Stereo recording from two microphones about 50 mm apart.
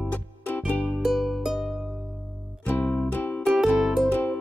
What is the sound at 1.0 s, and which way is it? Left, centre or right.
Music, centre.